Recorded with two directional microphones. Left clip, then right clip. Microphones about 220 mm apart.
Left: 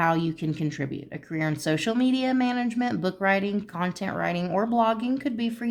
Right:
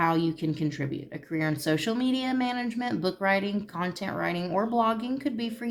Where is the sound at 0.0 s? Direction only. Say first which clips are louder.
Left 1 dB; 30° left (ahead or behind).